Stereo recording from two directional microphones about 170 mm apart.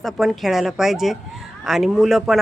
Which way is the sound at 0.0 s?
Centre (ahead or behind).